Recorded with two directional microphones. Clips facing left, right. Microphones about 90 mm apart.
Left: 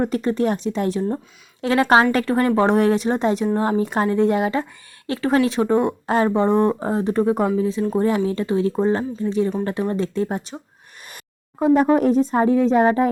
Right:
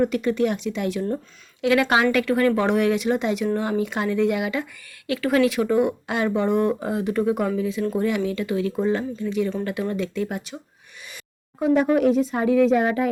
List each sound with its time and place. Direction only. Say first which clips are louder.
0.0 s speech: left 1 dB; 35° left (ahead or behind)
11.6 s speech: left 3 dB; 40° left (ahead or behind)